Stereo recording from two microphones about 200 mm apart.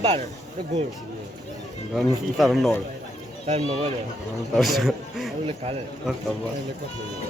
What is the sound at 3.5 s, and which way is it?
Speech, 35° right (ahead or behind).